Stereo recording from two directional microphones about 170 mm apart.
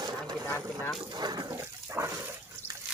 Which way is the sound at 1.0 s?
25° right (ahead or behind).